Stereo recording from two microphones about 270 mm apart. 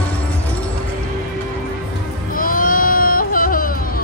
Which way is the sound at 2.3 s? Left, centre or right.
Left.